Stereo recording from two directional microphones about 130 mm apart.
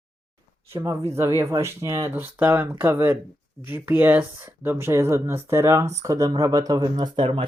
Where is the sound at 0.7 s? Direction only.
20° right (ahead or behind).